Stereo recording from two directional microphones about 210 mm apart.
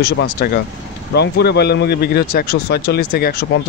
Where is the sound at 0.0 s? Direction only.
50° left (ahead or behind).